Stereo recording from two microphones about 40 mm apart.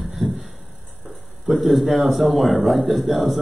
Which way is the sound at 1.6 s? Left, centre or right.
Centre.